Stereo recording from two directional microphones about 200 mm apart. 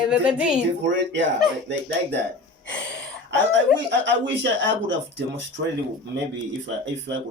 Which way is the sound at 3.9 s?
60° right (ahead or behind).